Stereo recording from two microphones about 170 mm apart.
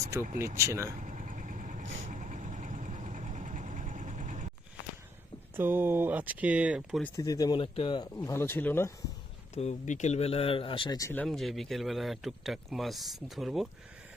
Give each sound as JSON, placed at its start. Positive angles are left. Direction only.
{"t": 0.5, "sound": "speech", "side_deg": -15}
{"t": 0.9, "sound": "vehicle", "side_deg": -45}
{"t": 5.5, "sound": "speech", "side_deg": -10}
{"t": 7.2, "sound": "speech", "side_deg": 20}
{"t": 9.6, "sound": "speech", "side_deg": 45}
{"t": 11.2, "sound": "speech", "side_deg": 0}